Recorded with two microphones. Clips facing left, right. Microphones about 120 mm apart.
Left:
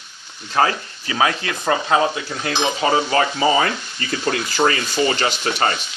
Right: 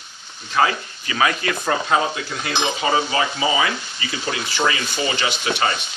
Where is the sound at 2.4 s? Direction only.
40° left (ahead or behind).